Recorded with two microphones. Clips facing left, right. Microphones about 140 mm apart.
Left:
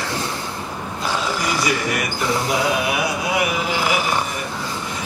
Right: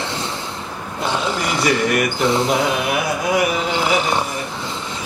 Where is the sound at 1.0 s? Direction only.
25° right (ahead or behind).